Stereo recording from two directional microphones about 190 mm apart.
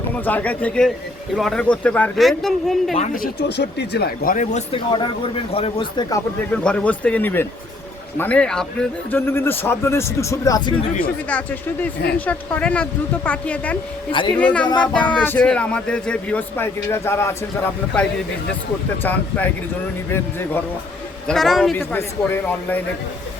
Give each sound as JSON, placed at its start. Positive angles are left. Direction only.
{"t": 0.3, "sound": "speech", "side_deg": 10}
{"t": 2.9, "sound": "speech", "side_deg": 40}
{"t": 3.6, "sound": "speech", "side_deg": 60}
{"t": 4.7, "sound": "speech", "side_deg": 25}
{"t": 6.6, "sound": "speech", "side_deg": 5}
{"t": 11.3, "sound": "speech", "side_deg": 5}
{"t": 14.1, "sound": "speech", "side_deg": 25}
{"t": 14.3, "sound": "speech", "side_deg": 5}
{"t": 20.1, "sound": "speech", "side_deg": 10}
{"t": 21.8, "sound": "speech", "side_deg": 10}